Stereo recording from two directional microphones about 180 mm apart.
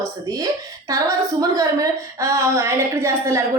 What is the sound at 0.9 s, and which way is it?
Speech, 20° right (ahead or behind).